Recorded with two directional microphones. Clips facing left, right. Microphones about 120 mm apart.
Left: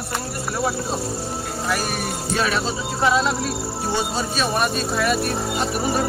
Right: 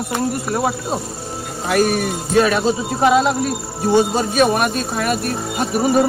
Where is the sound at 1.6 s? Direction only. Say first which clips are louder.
Right 9 dB; 55° right (ahead or behind).